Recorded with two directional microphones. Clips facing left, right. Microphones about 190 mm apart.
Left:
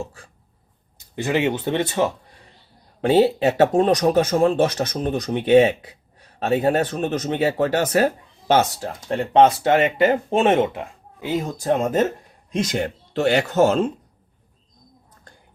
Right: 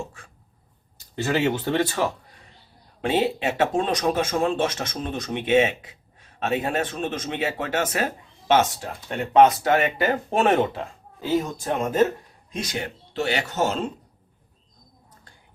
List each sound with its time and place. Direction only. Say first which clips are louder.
0.9 s speech: left 2 dB; 20° left (ahead or behind)
3.0 s speech: left 7 dB; 35° left (ahead or behind); by 11.3 s 20° left (ahead or behind)
12.7 s speech: left 6 dB; 50° left (ahead or behind)